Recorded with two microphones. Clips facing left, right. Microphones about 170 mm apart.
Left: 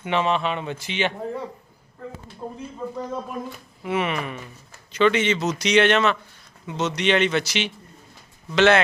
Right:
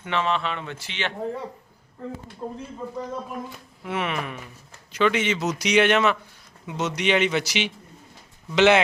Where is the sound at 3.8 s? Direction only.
Centre (ahead or behind).